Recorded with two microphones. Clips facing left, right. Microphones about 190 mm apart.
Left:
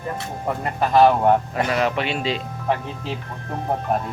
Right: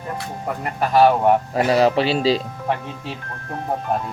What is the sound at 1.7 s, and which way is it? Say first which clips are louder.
Speech: right 7 dB; 30° right (ahead or behind).